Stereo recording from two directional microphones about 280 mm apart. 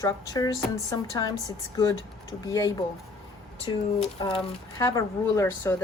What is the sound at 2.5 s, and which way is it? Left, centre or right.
Speech, centre.